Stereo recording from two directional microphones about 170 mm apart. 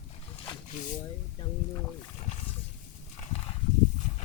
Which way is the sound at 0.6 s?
45° left (ahead or behind).